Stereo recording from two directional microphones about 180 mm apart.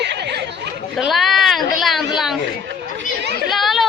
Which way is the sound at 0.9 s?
Centre (ahead or behind).